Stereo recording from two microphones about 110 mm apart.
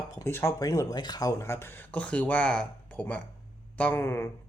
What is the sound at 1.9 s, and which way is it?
Speech, 10° left (ahead or behind).